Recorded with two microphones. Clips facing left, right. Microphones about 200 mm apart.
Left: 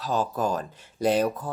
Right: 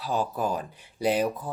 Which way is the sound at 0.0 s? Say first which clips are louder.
Left 2 dB; 15° right (ahead or behind).